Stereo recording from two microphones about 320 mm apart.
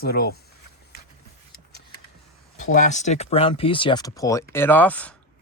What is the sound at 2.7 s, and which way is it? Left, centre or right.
Speech, left.